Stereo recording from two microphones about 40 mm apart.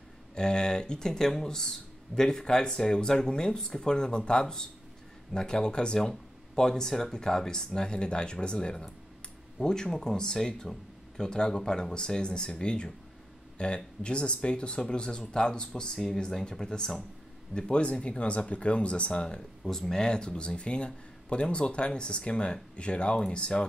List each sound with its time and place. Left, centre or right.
0.4 s speech: centre
17.6 s speech: left
19.6 s speech: centre